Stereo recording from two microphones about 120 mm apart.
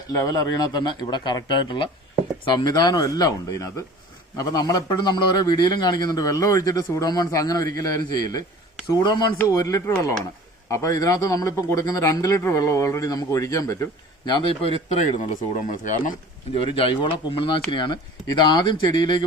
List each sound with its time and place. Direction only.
0.1 s a man's voice: 30° left (ahead or behind)
9.5 s speech: 25° left (ahead or behind)
14.3 s a man's voice: 35° left (ahead or behind)
15.6 s speech: 90° left
16.7 s a man's voice: 45° left (ahead or behind)